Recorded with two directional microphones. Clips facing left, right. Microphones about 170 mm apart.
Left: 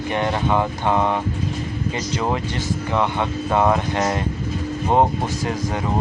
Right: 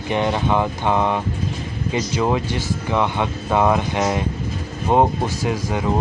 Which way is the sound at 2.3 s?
15° right (ahead or behind).